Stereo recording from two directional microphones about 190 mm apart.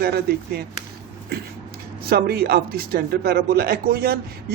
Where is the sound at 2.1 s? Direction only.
55° right (ahead or behind).